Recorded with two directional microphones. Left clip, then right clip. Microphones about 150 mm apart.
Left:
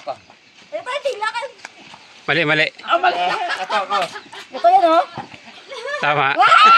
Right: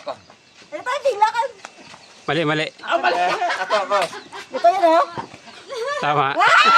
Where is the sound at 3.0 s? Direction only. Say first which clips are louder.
Left 1 dB; 25° right (ahead or behind).